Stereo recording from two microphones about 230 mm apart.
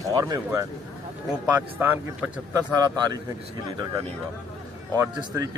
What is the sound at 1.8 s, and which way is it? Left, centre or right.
Speech, centre.